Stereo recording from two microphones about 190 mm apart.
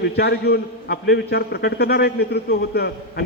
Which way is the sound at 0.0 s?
60° left (ahead or behind).